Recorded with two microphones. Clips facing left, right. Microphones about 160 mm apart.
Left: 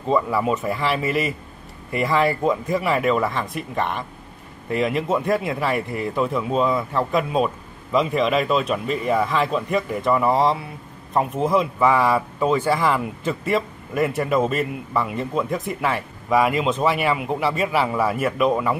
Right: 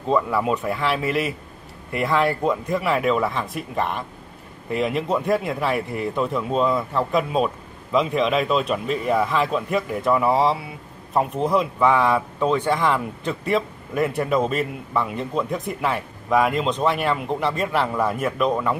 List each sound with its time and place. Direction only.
0.0 s speech: centre (ahead or behind)